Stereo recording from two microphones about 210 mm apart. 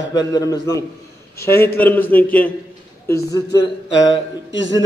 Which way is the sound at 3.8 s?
60° left (ahead or behind).